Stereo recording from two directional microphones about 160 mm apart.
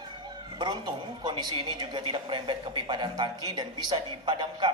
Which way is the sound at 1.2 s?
30° right (ahead or behind).